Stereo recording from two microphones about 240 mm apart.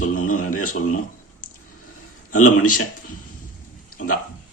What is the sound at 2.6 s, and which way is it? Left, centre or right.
Speech, left.